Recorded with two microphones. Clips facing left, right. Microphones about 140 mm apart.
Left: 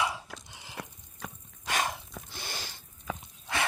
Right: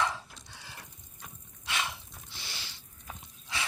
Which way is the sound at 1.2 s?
90° left.